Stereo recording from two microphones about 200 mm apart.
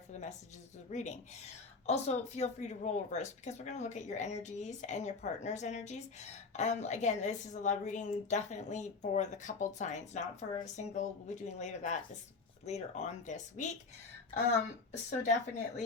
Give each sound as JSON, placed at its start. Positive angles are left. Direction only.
{"t": 0.1, "sound": "a woman's voice", "side_deg": 35}
{"t": 15.1, "sound": "a woman's voice", "side_deg": 35}